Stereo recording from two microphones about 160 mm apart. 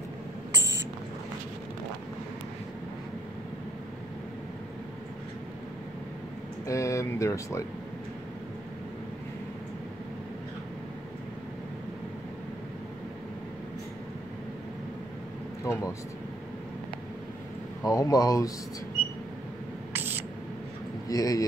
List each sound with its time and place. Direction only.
0.6 s a sound: 90° right
6.7 s speech: 20° left (ahead or behind)
15.6 s vehicle: 20° left (ahead or behind)
17.8 s speech: 20° left (ahead or behind)
19.9 s a sound: 10° right (ahead or behind)
21.1 s speech: 20° left (ahead or behind)